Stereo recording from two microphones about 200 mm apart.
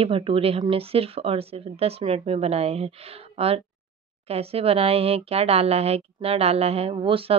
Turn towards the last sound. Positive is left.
turn(degrees=-30)  # may be behind; listen again after turning